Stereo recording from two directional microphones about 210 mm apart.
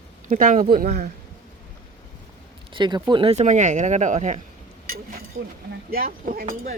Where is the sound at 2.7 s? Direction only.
20° right (ahead or behind).